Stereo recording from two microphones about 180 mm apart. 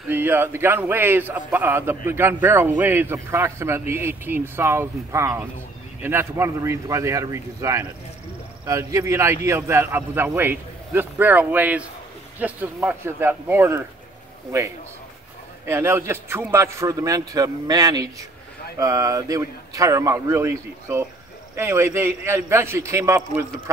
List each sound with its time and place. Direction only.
0.1 s a man's voice: 10° right (ahead or behind)